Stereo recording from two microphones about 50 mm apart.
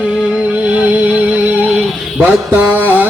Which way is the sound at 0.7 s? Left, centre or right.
Centre.